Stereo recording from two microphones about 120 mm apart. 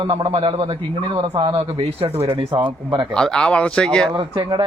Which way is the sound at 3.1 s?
5° left (ahead or behind).